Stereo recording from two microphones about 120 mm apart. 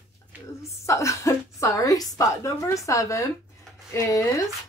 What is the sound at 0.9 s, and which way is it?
A woman's voice, 25° left (ahead or behind).